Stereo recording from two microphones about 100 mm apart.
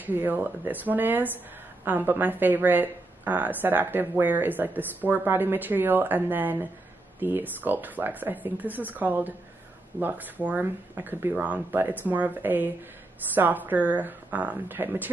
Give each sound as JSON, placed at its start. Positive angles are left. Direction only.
{"t": 0.0, "sound": "speech", "side_deg": -20}